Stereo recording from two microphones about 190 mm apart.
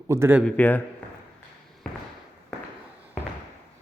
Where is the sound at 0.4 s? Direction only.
10° left (ahead or behind).